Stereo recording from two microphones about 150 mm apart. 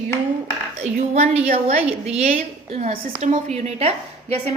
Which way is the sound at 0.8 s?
45° right (ahead or behind).